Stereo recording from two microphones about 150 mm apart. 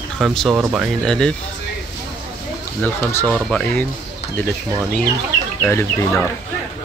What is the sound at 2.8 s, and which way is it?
Speech, 10° left (ahead or behind).